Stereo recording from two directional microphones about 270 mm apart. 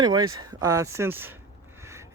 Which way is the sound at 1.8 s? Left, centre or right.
Centre.